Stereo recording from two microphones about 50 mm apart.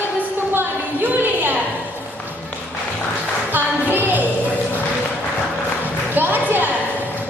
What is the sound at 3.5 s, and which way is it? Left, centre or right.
Singing, right.